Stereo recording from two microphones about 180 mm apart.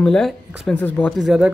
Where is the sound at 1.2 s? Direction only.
5° right (ahead or behind).